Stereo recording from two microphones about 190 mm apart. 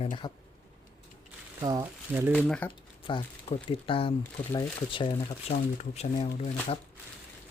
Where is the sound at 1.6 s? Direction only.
15° right (ahead or behind).